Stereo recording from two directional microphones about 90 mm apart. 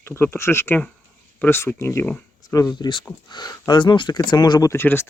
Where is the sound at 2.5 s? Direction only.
40° left (ahead or behind).